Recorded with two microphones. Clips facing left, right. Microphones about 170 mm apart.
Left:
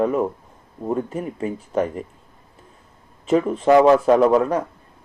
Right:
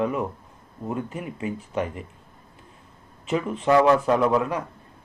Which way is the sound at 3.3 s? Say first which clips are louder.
Left 7 dB; 40° left (ahead or behind).